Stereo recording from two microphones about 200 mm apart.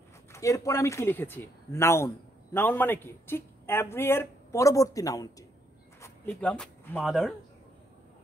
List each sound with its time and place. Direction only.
0.3 s speech: 15° left (ahead or behind)